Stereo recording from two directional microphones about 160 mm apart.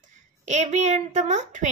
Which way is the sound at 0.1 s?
50° right (ahead or behind).